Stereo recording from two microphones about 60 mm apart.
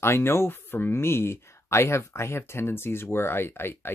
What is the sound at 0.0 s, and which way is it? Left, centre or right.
Speech, left.